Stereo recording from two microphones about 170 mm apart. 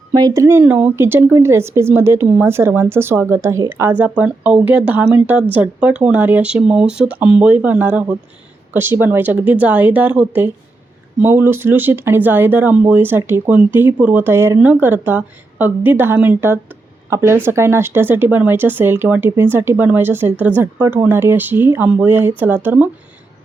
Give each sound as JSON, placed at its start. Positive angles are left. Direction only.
{"t": 0.1, "sound": "speech", "side_deg": -20}